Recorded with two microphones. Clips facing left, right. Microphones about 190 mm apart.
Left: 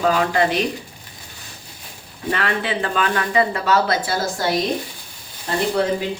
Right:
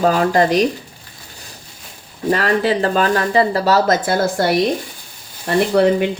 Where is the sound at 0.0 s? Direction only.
40° right (ahead or behind).